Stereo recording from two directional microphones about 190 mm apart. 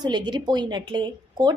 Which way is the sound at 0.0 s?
25° right (ahead or behind).